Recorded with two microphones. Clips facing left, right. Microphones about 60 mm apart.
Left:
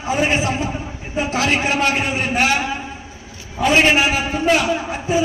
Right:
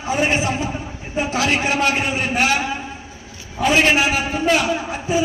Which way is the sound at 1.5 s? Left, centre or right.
Centre.